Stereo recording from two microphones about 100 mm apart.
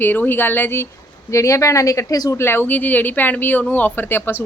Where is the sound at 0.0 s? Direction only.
20° left (ahead or behind); by 2.4 s 35° left (ahead or behind).